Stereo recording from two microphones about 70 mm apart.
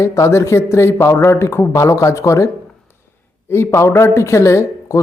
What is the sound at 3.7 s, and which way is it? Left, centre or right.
A man's voice, left.